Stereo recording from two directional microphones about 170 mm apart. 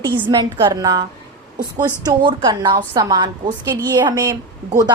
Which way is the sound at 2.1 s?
25° right (ahead or behind).